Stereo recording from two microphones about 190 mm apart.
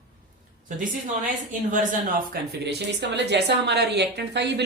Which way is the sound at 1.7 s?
50° right (ahead or behind).